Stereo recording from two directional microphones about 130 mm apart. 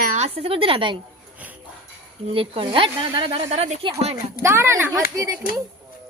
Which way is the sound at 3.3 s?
55° right (ahead or behind).